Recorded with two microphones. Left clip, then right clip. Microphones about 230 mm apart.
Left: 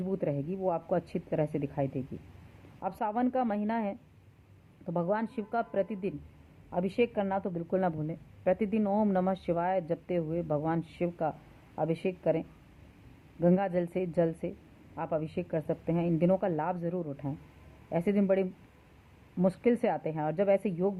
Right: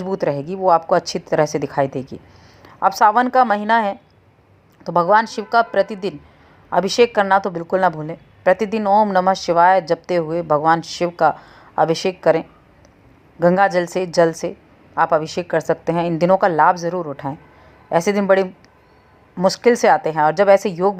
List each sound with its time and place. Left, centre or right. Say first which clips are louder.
0.1 s a woman's voice: right 13 dB; centre
13.4 s a woman's voice: right 14 dB; centre